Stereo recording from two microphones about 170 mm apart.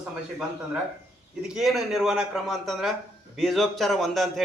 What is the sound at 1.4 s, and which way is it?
A man's voice, centre (ahead or behind).